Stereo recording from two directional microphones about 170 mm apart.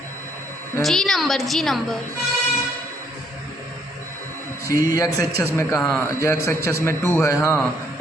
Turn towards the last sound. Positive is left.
turn(degrees=15)  # may be behind; listen again after turning